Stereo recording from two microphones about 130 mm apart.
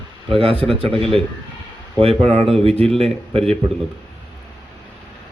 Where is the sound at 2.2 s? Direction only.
50° right (ahead or behind).